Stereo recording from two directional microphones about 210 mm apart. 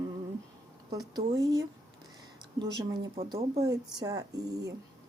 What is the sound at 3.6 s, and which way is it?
A woman's voice, 15° right (ahead or behind).